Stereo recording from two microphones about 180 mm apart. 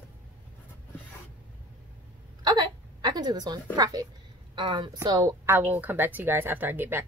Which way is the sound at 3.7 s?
20° right (ahead or behind).